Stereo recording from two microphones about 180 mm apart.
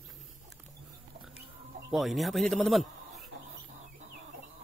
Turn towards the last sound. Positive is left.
turn(degrees=0)  # may be behind; listen again after turning